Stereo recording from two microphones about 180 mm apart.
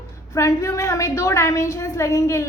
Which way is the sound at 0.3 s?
20° left (ahead or behind).